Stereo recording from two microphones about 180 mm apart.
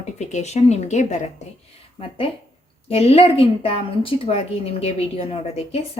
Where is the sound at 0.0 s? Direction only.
40° left (ahead or behind).